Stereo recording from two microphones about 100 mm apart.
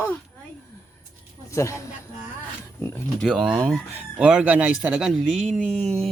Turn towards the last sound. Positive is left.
turn(degrees=5)  # may be behind; listen again after turning